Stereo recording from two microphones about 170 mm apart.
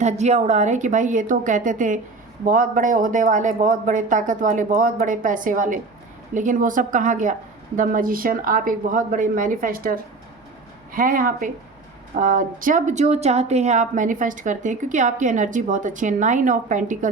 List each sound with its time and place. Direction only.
0.0 s a woman's voice: 40° right (ahead or behind)